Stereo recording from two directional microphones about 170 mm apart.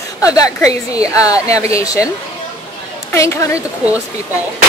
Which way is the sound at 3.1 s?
15° left (ahead or behind).